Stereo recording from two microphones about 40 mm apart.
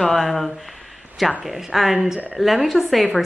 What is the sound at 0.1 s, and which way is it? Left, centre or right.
Speech, centre.